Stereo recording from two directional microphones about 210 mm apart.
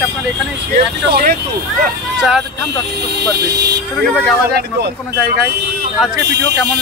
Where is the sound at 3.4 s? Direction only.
50° right (ahead or behind).